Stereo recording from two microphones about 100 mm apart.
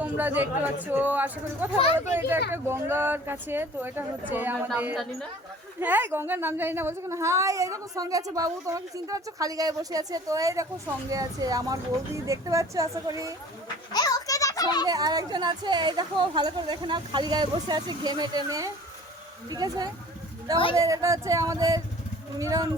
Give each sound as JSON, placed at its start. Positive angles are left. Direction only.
{"t": 0.0, "sound": "a man's voice", "side_deg": -15}
{"t": 13.9, "sound": "a sound", "side_deg": 40}
{"t": 14.8, "sound": "a woman's voice", "side_deg": -40}